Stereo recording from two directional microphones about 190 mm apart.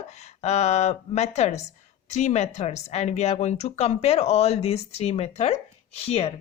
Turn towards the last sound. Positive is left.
turn(degrees=35)  # may be behind; listen again after turning